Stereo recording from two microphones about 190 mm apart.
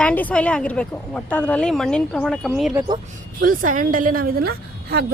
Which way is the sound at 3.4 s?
45° right (ahead or behind).